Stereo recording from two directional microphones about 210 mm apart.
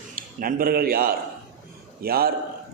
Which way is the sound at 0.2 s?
40° right (ahead or behind).